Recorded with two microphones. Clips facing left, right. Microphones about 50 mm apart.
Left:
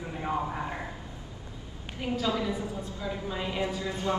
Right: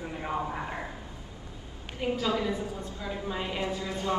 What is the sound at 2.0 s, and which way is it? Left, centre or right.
A woman's voice, centre.